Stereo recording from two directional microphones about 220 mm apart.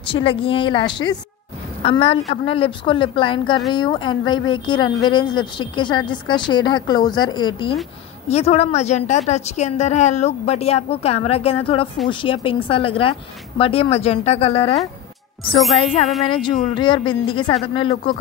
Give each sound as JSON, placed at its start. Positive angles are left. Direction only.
{"t": 0.0, "sound": "speech", "side_deg": 25}